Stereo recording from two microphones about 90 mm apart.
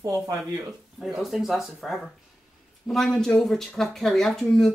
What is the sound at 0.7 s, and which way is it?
Speech, 5° right (ahead or behind).